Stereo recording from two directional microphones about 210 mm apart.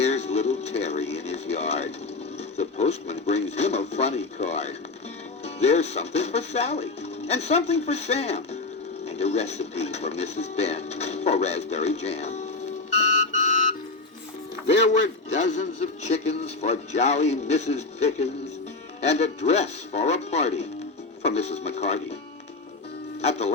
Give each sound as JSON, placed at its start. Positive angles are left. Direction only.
{"t": 0.0, "sound": "music", "side_deg": 30}
{"t": 2.4, "sound": "speech", "side_deg": 30}
{"t": 13.0, "sound": "music", "side_deg": 35}
{"t": 15.4, "sound": "speech", "side_deg": 35}